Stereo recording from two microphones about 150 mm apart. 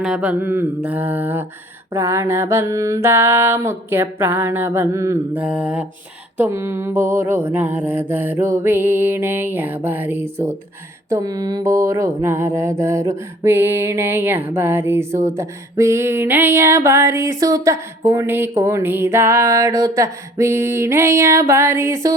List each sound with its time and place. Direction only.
0.0 s mantra: 5° right (ahead or behind)